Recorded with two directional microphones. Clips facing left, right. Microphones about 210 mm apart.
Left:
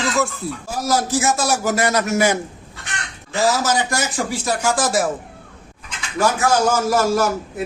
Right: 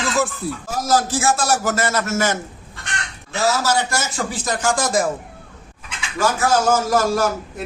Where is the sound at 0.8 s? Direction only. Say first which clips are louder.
Even; 15° left (ahead or behind).